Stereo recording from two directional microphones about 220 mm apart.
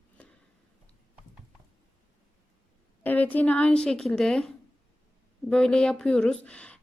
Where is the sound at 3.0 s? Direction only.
10° left (ahead or behind).